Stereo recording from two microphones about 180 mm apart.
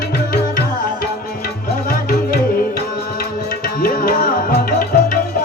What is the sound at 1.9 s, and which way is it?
Music, 55° left (ahead or behind).